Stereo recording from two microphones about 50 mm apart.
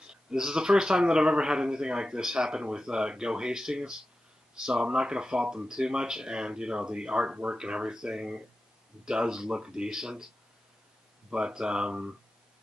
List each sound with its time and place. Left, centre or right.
0.0 s speech: centre
11.2 s speech: centre